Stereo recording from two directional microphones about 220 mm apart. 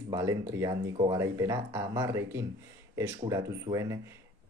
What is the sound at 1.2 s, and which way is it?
Speech, 15° right (ahead or behind).